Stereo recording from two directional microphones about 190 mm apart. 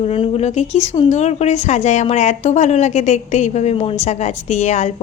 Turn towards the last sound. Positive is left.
turn(degrees=35)  # may be behind; listen again after turning